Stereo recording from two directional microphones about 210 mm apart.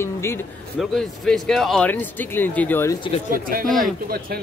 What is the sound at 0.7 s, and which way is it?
Speech, centre (ahead or behind).